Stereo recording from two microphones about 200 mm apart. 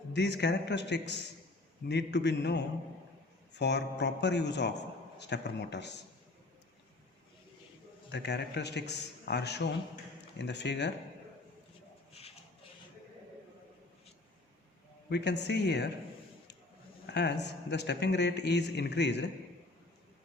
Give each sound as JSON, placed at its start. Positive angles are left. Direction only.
{"t": 0.1, "sound": "a man's voice", "side_deg": 60}
{"t": 8.1, "sound": "a man's voice", "side_deg": 60}
{"t": 15.1, "sound": "a man's voice", "side_deg": 60}
{"t": 17.1, "sound": "a man's voice", "side_deg": 60}